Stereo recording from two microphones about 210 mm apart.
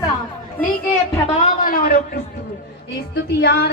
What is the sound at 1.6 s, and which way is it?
Speech, 45° left (ahead or behind).